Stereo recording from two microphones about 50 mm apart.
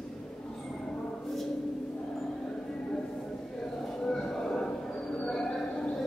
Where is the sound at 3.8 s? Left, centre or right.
Centre.